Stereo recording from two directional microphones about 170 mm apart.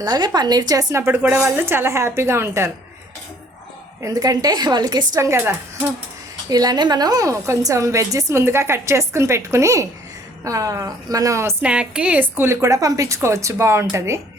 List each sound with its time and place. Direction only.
0.0 s a woman's voice: 25° right (ahead or behind)
4.0 s a woman's voice: 20° right (ahead or behind)